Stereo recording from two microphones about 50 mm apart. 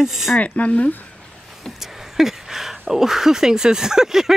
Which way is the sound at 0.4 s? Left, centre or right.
Left.